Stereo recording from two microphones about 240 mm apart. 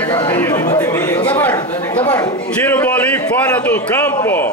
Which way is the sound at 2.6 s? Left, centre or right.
Centre.